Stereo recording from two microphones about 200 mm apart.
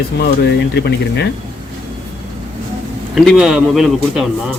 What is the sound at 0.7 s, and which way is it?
Speech, 55° left (ahead or behind).